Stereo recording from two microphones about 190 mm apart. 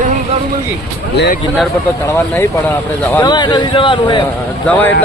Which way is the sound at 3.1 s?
20° left (ahead or behind).